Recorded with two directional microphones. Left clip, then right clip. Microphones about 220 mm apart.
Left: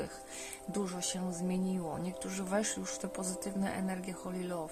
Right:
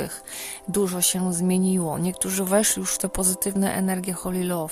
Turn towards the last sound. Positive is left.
turn(degrees=-50)  # may be behind; listen again after turning